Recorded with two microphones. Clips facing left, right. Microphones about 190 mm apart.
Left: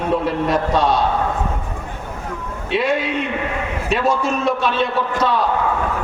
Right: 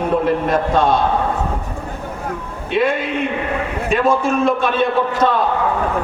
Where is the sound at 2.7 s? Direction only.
55° right (ahead or behind).